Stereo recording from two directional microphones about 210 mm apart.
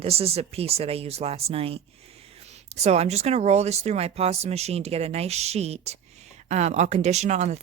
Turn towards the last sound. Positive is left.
turn(degrees=-35)  # may be behind; listen again after turning